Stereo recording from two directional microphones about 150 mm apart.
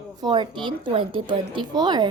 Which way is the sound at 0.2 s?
30° right (ahead or behind).